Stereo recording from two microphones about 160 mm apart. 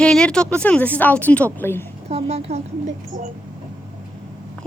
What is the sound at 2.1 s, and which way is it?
A woman's voice, 40° right (ahead or behind).